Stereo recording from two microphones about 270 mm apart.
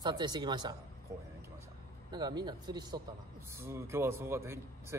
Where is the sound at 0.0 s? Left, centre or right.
Centre.